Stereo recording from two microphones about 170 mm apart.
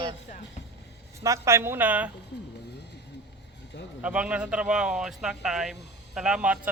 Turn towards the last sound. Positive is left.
turn(degrees=-5)  # may be behind; listen again after turning